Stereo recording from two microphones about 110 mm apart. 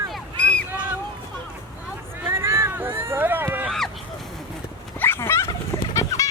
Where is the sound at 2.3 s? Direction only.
25° right (ahead or behind).